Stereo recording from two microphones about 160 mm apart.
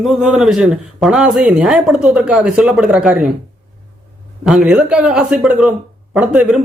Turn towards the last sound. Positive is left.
turn(degrees=-5)  # may be behind; listen again after turning